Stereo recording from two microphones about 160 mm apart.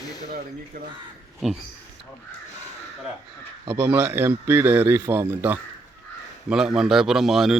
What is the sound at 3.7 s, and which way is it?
A man's voice, 15° right (ahead or behind).